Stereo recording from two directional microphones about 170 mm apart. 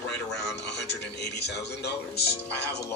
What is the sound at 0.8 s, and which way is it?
Speech, 85° left.